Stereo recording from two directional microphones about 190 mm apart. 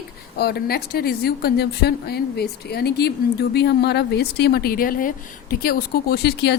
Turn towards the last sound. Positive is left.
turn(degrees=60)  # may be behind; listen again after turning